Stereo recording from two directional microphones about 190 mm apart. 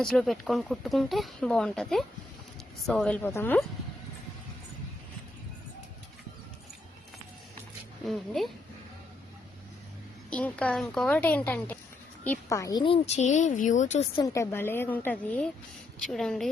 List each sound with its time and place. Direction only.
0.0 s a woman's voice: centre (ahead or behind)
8.0 s speech: centre (ahead or behind)
10.2 s a woman's voice: 5° left (ahead or behind); by 14.1 s 40° left (ahead or behind)
14.2 s a woman's voice: 15° left (ahead or behind)